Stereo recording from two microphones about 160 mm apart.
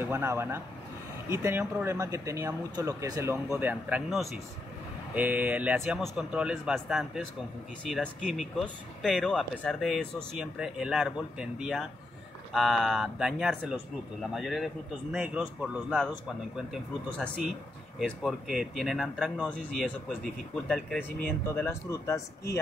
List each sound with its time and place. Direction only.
0.0 s speech: 15° right (ahead or behind)
17.9 s speech: centre (ahead or behind)
21.5 s speech: 15° left (ahead or behind)